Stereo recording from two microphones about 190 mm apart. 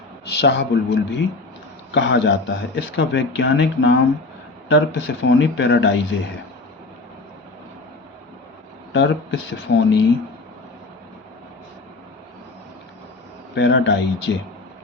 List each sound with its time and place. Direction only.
0.3 s speech: 65° left (ahead or behind)
8.9 s speech: 70° left (ahead or behind)
13.6 s speech: 70° left (ahead or behind)